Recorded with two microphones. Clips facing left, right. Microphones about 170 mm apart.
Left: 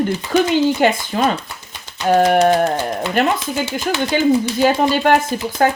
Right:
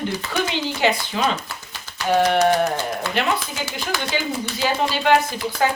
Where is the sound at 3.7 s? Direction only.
50° left (ahead or behind).